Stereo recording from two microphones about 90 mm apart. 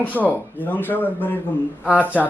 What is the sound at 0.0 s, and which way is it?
A man's voice, 20° left (ahead or behind).